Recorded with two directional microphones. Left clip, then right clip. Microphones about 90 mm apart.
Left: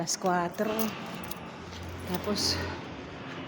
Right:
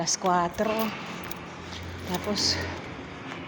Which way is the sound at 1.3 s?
10° left (ahead or behind).